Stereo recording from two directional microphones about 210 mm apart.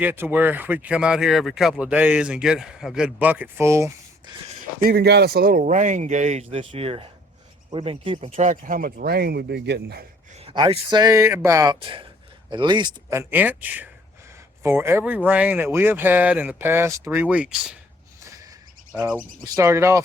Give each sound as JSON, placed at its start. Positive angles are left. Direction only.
{"t": 0.0, "sound": "speech", "side_deg": -10}
{"t": 4.8, "sound": "a man's voice", "side_deg": -45}
{"t": 10.4, "sound": "speech", "side_deg": -25}
{"t": 18.9, "sound": "speech", "side_deg": -5}